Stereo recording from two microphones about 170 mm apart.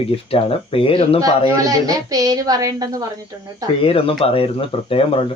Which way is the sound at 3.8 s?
35° left (ahead or behind).